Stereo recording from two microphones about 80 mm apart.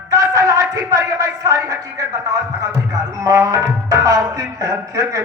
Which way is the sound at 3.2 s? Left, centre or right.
Right.